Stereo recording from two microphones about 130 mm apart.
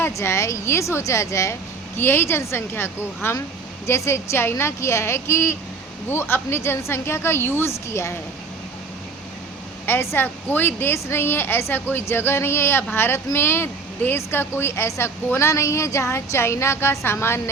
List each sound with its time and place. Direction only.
0.0 s a woman's voice: 20° left (ahead or behind)
9.8 s a woman's voice: 15° left (ahead or behind)